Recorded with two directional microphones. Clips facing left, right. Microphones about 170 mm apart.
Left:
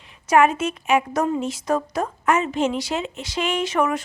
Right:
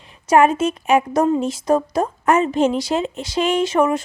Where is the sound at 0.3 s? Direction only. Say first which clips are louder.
Right 3 dB; 35° right (ahead or behind).